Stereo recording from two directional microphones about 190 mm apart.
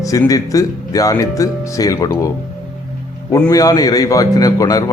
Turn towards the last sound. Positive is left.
turn(degrees=20)  # may be behind; listen again after turning